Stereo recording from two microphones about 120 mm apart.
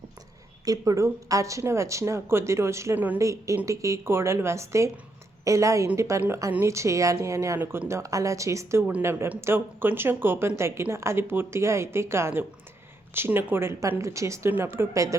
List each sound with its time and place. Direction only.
0.6 s speech: 30° right (ahead or behind)